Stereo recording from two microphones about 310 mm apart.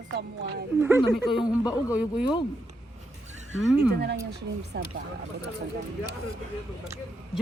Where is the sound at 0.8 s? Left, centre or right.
Centre.